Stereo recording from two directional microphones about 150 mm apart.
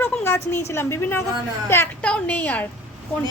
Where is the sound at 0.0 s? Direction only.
15° left (ahead or behind).